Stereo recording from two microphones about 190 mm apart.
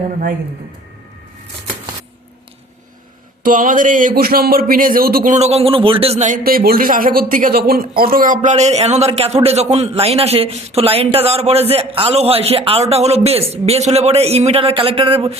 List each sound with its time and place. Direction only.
3.4 s speech: 45° right (ahead or behind)